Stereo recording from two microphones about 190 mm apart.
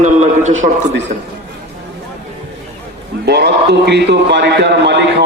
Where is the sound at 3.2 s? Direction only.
60° right (ahead or behind).